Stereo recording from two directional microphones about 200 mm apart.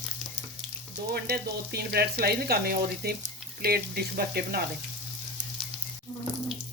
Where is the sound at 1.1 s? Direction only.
50° right (ahead or behind).